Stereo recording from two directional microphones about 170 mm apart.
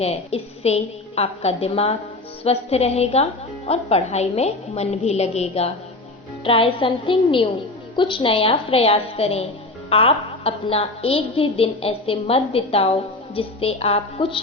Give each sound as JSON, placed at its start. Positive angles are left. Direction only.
{"t": 0.0, "sound": "a woman's voice", "side_deg": 40}